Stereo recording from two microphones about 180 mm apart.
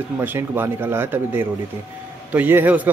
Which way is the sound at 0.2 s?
10° right (ahead or behind).